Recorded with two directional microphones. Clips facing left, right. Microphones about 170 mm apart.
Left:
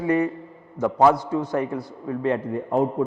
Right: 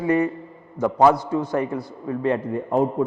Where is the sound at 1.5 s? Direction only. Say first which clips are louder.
Right 1 dB; 20° right (ahead or behind).